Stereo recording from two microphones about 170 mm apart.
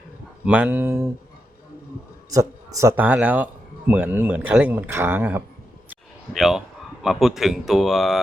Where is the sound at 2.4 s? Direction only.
20° right (ahead or behind).